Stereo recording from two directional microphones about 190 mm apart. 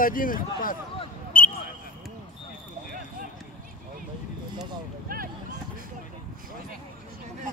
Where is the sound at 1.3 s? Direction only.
50° left (ahead or behind).